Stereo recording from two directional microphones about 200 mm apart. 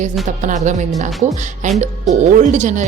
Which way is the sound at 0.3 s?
40° right (ahead or behind).